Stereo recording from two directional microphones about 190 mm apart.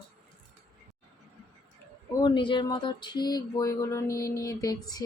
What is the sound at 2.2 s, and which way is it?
Speech, 25° left (ahead or behind).